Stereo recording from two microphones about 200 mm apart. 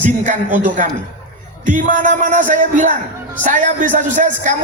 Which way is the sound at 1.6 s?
40° right (ahead or behind).